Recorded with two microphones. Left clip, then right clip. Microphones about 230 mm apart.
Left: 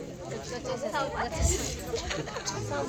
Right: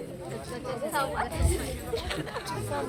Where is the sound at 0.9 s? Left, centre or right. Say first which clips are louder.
Right 3 dB; centre.